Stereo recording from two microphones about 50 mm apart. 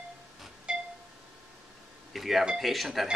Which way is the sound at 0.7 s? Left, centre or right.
Right.